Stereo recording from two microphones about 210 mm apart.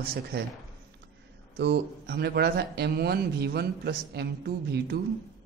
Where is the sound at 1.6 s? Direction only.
50° right (ahead or behind).